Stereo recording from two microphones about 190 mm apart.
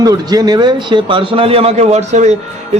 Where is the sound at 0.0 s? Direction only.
20° right (ahead or behind).